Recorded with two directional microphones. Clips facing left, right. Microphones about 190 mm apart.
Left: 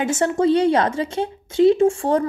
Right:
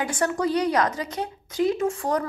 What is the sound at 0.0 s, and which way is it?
A woman's voice, 25° left (ahead or behind).